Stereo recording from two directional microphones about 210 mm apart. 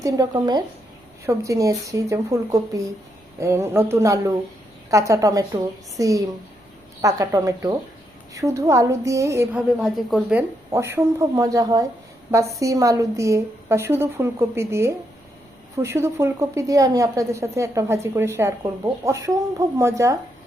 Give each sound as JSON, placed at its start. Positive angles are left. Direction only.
{"t": 0.0, "sound": "a woman's voice", "side_deg": -15}